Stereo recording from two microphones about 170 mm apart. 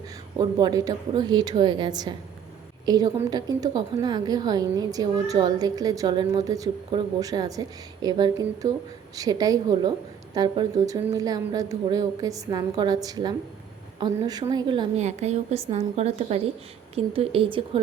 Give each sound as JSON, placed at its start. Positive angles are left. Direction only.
{"t": 0.3, "sound": "a woman's voice", "side_deg": -20}
{"t": 14.9, "sound": "a woman's voice", "side_deg": -40}